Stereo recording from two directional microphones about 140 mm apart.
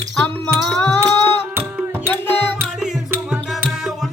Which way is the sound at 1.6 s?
15° right (ahead or behind).